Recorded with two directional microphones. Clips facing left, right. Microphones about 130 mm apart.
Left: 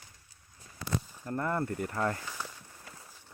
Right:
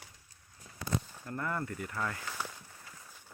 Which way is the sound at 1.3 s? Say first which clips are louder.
Left 5 dB; 35° left (ahead or behind).